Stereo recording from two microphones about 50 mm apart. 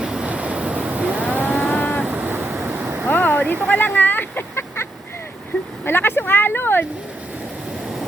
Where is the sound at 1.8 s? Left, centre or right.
Left.